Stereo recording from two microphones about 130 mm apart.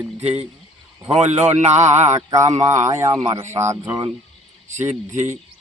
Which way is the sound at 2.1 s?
25° right (ahead or behind).